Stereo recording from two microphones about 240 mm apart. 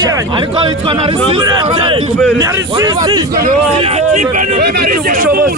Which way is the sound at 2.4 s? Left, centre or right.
Centre.